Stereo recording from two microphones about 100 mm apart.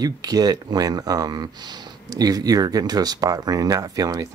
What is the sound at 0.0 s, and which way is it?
Speech, 40° right (ahead or behind).